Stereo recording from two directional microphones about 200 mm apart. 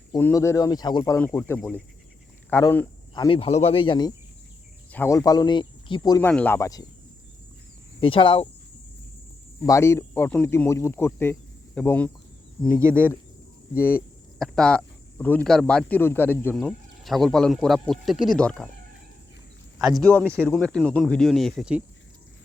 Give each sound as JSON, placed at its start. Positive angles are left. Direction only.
{"t": 0.1, "sound": "speech", "side_deg": 15}
{"t": 4.9, "sound": "speech", "side_deg": 10}
{"t": 6.1, "sound": "speech", "side_deg": 10}
{"t": 8.0, "sound": "speech", "side_deg": 25}
{"t": 9.6, "sound": "speech", "side_deg": 15}
{"t": 19.9, "sound": "speech", "side_deg": 5}